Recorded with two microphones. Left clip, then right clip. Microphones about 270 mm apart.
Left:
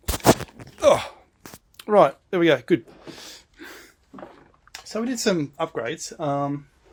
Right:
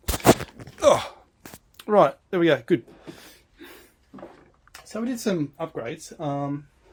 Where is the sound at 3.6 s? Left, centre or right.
Left.